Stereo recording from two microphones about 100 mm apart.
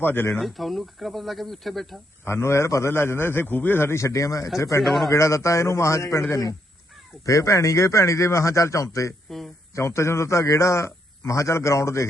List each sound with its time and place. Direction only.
0.0 s a man's voice: 20° left (ahead or behind)
0.3 s speech: centre (ahead or behind)
2.2 s a man's voice: 25° left (ahead or behind)
4.8 s speech: centre (ahead or behind)
5.1 s a man's voice: 30° left (ahead or behind)